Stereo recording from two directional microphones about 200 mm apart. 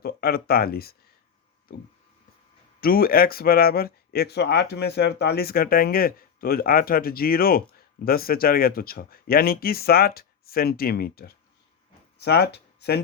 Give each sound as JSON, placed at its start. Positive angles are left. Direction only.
{"t": 0.0, "sound": "speech", "side_deg": 50}
{"t": 2.8, "sound": "speech", "side_deg": 45}